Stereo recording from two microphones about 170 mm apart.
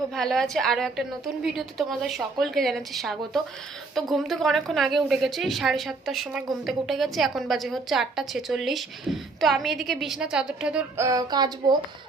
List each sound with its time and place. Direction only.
0.1 s a woman's voice: centre (ahead or behind)
11.0 s speech: 25° right (ahead or behind)